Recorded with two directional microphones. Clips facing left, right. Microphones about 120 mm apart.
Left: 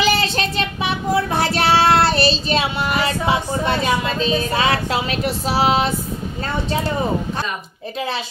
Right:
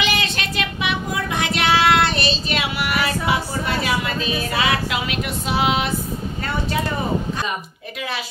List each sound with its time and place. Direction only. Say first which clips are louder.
0.0 s child singing: left 5 dB; 35° left (ahead or behind)